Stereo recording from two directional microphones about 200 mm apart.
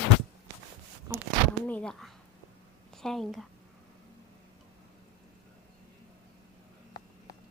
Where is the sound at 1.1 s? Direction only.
15° right (ahead or behind).